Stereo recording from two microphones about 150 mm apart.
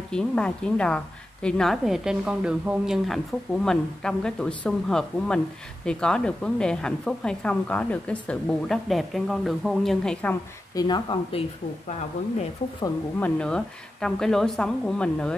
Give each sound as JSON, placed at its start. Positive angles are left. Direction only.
{"t": 0.1, "sound": "a woman's voice", "side_deg": 5}
{"t": 10.7, "sound": "speech", "side_deg": 25}
{"t": 13.2, "sound": "a woman's voice", "side_deg": 5}